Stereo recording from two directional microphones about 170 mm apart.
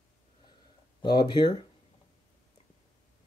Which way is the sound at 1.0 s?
25° left (ahead or behind).